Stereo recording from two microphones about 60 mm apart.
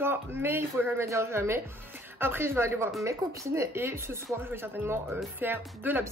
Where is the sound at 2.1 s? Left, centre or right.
Right.